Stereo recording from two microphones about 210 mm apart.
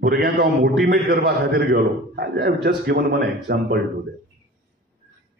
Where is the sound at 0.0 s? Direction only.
50° right (ahead or behind).